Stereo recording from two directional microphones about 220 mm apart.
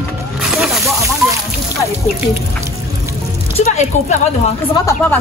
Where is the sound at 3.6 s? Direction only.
30° left (ahead or behind).